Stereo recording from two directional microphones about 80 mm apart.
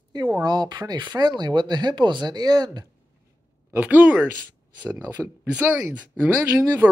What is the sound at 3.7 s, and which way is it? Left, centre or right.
Speech, right.